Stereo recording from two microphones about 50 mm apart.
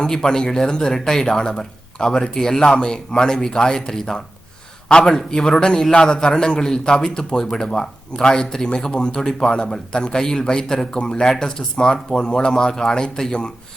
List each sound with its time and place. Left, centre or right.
0.0 s speech: centre